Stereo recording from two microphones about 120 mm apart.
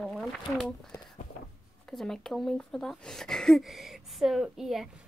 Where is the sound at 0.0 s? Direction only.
5° left (ahead or behind).